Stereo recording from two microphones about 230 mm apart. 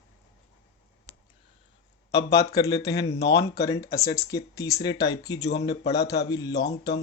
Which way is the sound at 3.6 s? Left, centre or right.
Centre.